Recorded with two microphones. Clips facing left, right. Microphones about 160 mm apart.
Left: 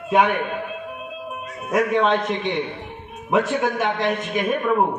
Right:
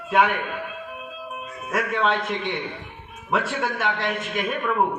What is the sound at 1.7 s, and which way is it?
A man's voice, 20° left (ahead or behind).